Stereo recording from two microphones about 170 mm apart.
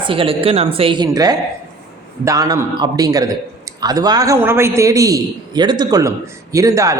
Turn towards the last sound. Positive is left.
turn(degrees=-20)  # may be behind; listen again after turning